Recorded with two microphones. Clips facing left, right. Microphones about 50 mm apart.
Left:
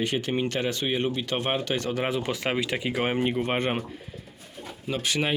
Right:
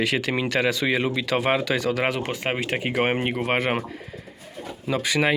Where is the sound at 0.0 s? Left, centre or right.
Right.